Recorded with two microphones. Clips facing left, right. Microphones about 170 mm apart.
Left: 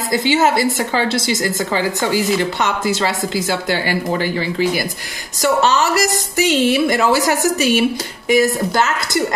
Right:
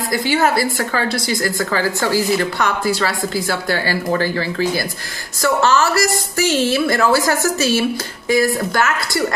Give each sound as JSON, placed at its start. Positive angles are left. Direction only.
{"t": 0.1, "sound": "a woman's voice", "side_deg": 20}